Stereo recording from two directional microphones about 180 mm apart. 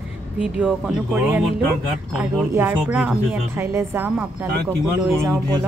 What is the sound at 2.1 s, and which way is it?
Speech, 10° right (ahead or behind).